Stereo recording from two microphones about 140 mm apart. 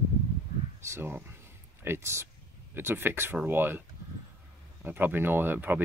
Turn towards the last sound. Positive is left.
turn(degrees=-10)  # may be behind; listen again after turning